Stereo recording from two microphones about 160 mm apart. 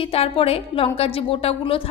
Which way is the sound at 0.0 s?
35° left (ahead or behind).